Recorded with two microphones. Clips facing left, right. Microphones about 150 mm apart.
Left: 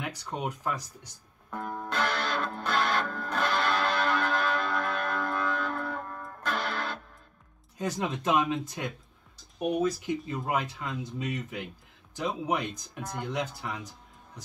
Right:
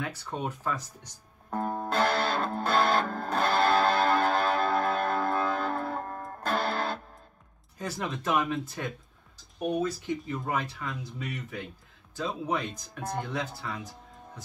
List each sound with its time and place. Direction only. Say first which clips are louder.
0.0 s speech: even; 15° left (ahead or behind)
1.5 s music: right 4 dB; 40° right (ahead or behind)
7.8 s speech: left 3 dB; 20° left (ahead or behind)